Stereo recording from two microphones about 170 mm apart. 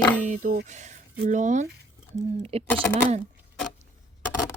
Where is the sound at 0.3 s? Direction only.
50° right (ahead or behind).